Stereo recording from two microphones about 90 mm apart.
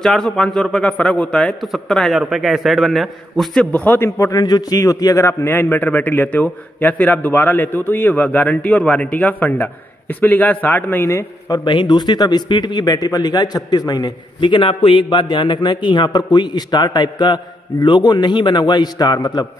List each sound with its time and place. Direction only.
0.0 s a man's voice: 5° left (ahead or behind)
3.7 s a man's voice: 20° left (ahead or behind)
4.3 s a man's voice: 50° left (ahead or behind)
4.7 s a man's voice: 35° left (ahead or behind)
5.5 s a man's voice: 25° left (ahead or behind)
11.1 s a man's voice: 40° left (ahead or behind)